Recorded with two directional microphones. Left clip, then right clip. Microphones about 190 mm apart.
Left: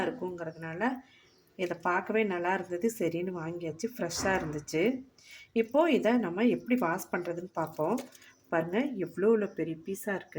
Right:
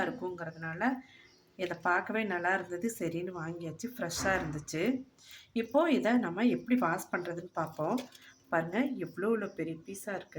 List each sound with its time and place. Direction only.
0.0 s speech: 20° left (ahead or behind); by 10.2 s 35° left (ahead or behind)